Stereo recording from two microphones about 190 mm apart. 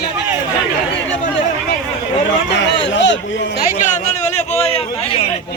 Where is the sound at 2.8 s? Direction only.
70° left (ahead or behind).